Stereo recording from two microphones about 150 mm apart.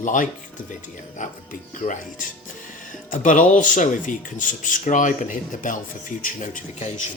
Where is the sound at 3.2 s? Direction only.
60° left (ahead or behind).